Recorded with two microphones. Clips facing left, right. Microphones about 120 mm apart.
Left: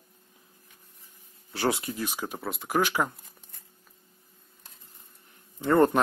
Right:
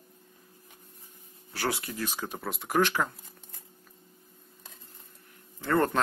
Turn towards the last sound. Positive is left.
turn(degrees=20)  # may be behind; listen again after turning